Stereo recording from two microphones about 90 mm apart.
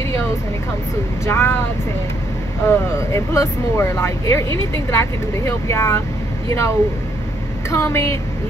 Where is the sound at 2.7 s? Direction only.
30° left (ahead or behind).